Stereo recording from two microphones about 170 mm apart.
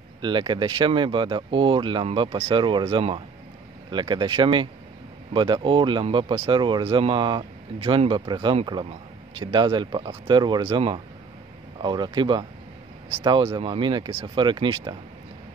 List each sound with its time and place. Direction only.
0.2 s speech: 30° right (ahead or behind)